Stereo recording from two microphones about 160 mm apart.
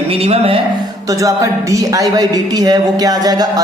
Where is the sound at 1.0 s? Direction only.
20° right (ahead or behind).